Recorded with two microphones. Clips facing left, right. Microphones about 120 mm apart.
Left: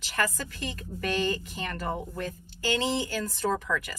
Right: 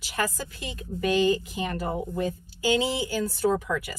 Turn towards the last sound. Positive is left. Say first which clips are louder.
# right 3 dB
turn(degrees=-10)  # may be behind; listen again after turning